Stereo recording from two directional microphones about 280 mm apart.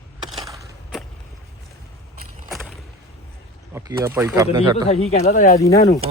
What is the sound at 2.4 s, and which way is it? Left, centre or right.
Vehicle, centre.